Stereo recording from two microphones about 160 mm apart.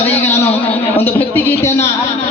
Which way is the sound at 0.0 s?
15° left (ahead or behind).